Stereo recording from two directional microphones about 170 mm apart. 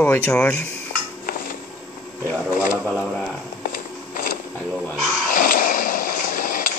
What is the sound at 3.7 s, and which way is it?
Music, 50° left (ahead or behind).